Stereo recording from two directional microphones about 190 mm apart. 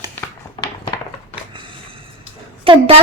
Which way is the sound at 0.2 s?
20° left (ahead or behind).